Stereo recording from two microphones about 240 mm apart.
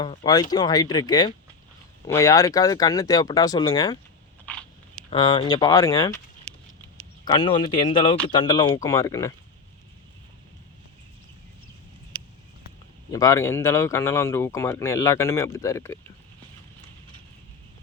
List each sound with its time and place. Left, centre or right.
0.0 s speech: left
0.5 s speech: centre
4.4 s biting: centre
5.1 s speech: centre
7.3 s speech: centre
13.1 s speech: centre